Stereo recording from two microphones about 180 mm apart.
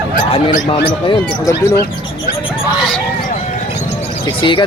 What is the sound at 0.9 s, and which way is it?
Speech, 25° left (ahead or behind).